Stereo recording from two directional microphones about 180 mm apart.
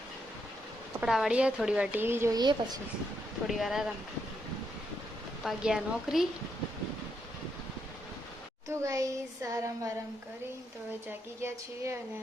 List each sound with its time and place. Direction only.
1.0 s a woman's voice: 5° right (ahead or behind); by 2.7 s 25° right (ahead or behind)
3.4 s a woman's voice: centre (ahead or behind)
5.4 s a woman's voice: centre (ahead or behind)
8.8 s a woman's voice: 20° right (ahead or behind)
11.4 s a woman's voice: 15° right (ahead or behind)